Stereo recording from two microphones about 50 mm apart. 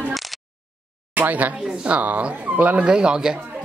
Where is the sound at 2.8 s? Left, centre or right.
Centre.